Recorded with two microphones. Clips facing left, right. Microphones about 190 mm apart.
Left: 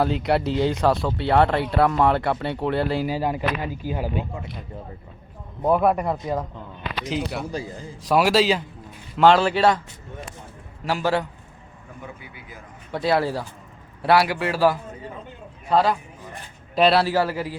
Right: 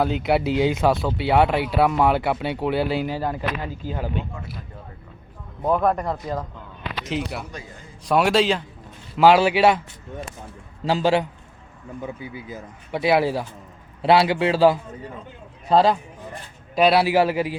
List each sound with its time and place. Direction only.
0.0 s speech: centre (ahead or behind)
3.1 s speech: 10° left (ahead or behind)
5.6 s a man's voice: 10° left (ahead or behind); by 9.8 s 10° right (ahead or behind)
10.8 s a man's voice: 20° right (ahead or behind)
12.9 s a man's voice: 15° right (ahead or behind)
16.7 s a man's voice: 10° right (ahead or behind)